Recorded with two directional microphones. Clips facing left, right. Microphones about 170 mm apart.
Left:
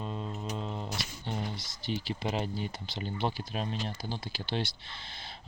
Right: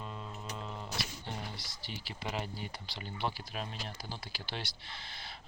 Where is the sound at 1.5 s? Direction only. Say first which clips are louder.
Left 10 dB; 20° left (ahead or behind).